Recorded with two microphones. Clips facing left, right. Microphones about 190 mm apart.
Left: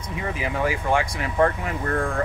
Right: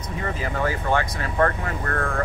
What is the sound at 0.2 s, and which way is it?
Speech, 10° left (ahead or behind).